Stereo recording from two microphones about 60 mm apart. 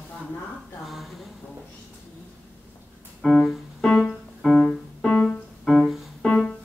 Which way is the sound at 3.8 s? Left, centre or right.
Centre.